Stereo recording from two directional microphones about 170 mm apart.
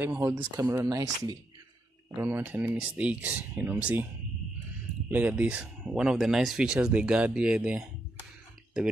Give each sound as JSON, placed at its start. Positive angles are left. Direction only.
{"t": 0.0, "sound": "speech", "side_deg": -10}
{"t": 5.1, "sound": "speech", "side_deg": -10}